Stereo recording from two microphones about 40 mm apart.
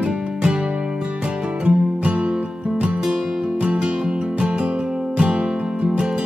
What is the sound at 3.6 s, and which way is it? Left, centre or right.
Music, right.